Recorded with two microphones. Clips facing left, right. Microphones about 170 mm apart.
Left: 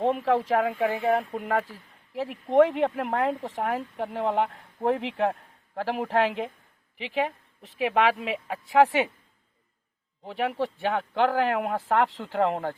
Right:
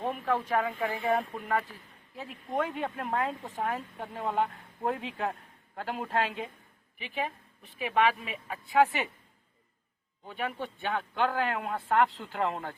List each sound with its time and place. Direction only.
0.0 s speech: 90° left
7.0 s speech: 90° left; by 9.0 s 75° left (ahead or behind)
10.2 s speech: 90° left